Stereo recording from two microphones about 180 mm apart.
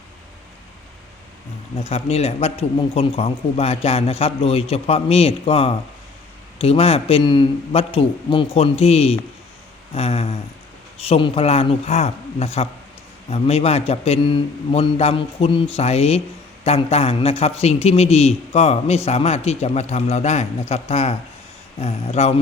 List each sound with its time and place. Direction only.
1.8 s a man's voice: 35° left (ahead or behind)